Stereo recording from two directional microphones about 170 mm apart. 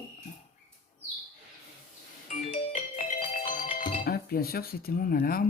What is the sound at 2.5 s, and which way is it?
Music, 50° left (ahead or behind).